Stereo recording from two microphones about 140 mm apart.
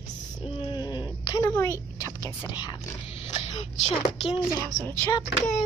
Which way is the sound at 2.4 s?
30° left (ahead or behind).